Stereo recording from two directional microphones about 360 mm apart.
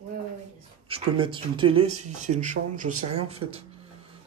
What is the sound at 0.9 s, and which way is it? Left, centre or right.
Speech, centre.